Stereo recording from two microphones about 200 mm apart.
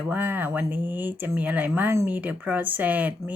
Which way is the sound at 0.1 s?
10° right (ahead or behind).